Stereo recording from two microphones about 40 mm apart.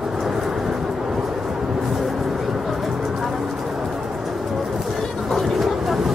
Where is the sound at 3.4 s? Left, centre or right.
Centre.